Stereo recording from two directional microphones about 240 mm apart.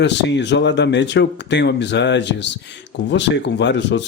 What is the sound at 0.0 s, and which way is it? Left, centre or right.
A man's voice, left.